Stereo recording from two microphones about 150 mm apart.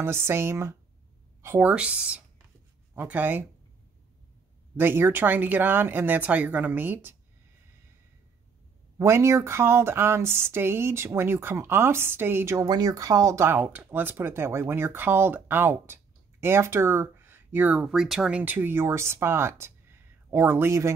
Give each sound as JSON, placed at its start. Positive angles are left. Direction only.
{"t": 0.0, "sound": "speech", "side_deg": -15}
{"t": 4.7, "sound": "speech", "side_deg": -15}
{"t": 8.9, "sound": "speech", "side_deg": -20}